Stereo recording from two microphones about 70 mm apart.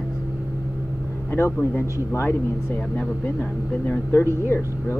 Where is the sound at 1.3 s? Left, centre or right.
Left.